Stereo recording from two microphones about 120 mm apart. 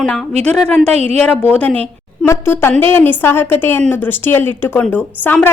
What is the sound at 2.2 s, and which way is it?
A woman's voice, 20° left (ahead or behind).